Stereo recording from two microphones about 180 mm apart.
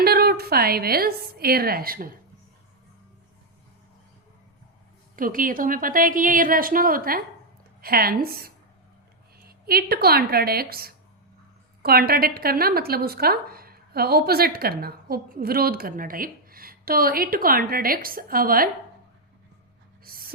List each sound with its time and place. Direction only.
0.0 s a woman's voice: 60° right (ahead or behind)
5.1 s a woman's voice: 50° right (ahead or behind)
20.1 s a sound: 55° right (ahead or behind)